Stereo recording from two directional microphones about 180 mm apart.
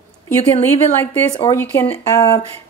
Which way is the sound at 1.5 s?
10° left (ahead or behind).